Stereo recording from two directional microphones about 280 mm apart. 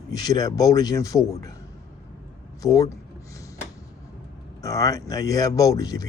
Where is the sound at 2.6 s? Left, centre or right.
Centre.